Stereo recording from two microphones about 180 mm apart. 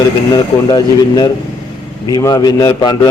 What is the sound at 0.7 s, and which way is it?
A man's voice, 25° left (ahead or behind).